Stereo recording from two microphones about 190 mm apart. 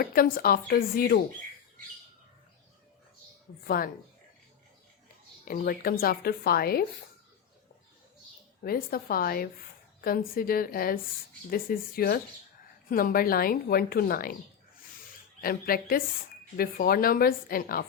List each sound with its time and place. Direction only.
0.0 s a woman's voice: 50° left (ahead or behind)
5.5 s a woman's voice: 50° left (ahead or behind)
8.6 s a woman's voice: 50° left (ahead or behind)
15.4 s a woman's voice: 50° left (ahead or behind)